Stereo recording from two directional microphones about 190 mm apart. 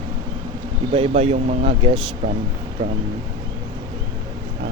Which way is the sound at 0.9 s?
30° right (ahead or behind).